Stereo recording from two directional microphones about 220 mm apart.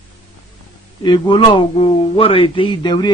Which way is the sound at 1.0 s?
20° left (ahead or behind).